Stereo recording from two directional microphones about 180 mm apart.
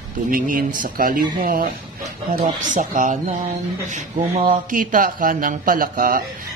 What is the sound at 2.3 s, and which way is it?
A man's voice, 45° right (ahead or behind).